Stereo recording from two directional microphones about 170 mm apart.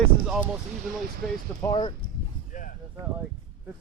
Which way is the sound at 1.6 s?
25° left (ahead or behind).